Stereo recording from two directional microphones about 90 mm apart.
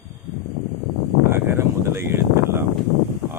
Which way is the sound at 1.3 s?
25° right (ahead or behind).